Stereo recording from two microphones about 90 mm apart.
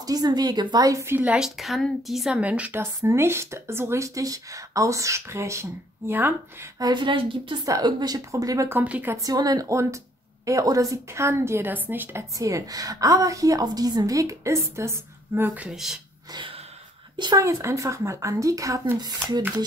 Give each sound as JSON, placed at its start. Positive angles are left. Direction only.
{"t": 0.0, "sound": "speech", "side_deg": -45}
{"t": 1.0, "sound": "a woman's voice", "side_deg": -25}
{"t": 1.3, "sound": "a woman's voice", "side_deg": -5}
{"t": 2.4, "sound": "a woman's voice", "side_deg": -15}
{"t": 3.0, "sound": "speech", "side_deg": -30}
{"t": 6.8, "sound": "a woman's voice", "side_deg": -60}
{"t": 7.6, "sound": "speech", "side_deg": -45}
{"t": 8.8, "sound": "a woman's voice", "side_deg": -15}
{"t": 9.1, "sound": "a woman's voice", "side_deg": -45}
{"t": 12.4, "sound": "speech", "side_deg": -40}
{"t": 15.7, "sound": "a woman's voice", "side_deg": -5}
{"t": 17.4, "sound": "speech", "side_deg": -35}
{"t": 18.9, "sound": "speech", "side_deg": -50}